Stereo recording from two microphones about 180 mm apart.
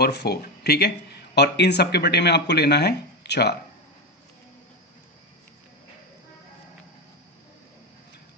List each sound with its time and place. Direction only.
0.0 s speech: 65° left (ahead or behind)